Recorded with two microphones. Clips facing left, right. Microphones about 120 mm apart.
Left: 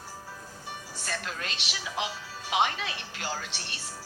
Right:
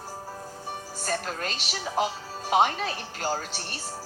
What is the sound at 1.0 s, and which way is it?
Speech, 40° right (ahead or behind).